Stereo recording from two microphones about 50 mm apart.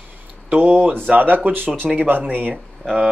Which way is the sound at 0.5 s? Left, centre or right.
Right.